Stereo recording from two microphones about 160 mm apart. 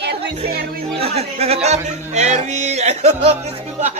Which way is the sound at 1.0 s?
40° right (ahead or behind).